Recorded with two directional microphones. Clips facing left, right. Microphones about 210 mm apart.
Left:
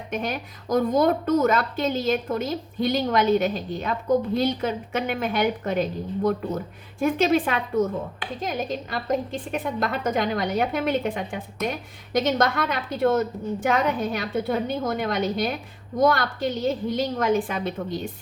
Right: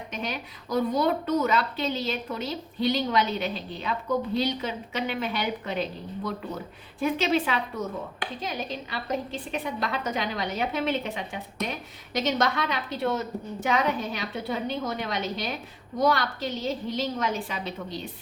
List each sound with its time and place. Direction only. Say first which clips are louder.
0.1 s a woman's voice: left 6 dB; 50° left (ahead or behind)